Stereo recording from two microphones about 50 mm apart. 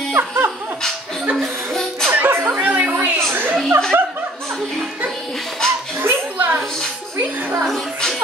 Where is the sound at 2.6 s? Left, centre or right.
Right.